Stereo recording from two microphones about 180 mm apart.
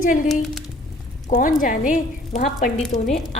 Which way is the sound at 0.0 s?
50° left (ahead or behind).